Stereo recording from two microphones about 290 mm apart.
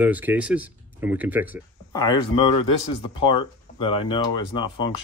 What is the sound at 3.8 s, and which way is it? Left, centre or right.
Speech, centre.